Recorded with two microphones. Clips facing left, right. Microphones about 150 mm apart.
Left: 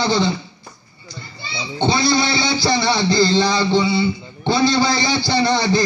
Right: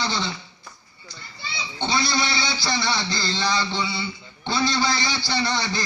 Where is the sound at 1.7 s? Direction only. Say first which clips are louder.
Left 7 dB; 35° left (ahead or behind).